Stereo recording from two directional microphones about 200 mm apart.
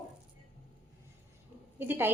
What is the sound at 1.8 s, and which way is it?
Speech, 10° right (ahead or behind).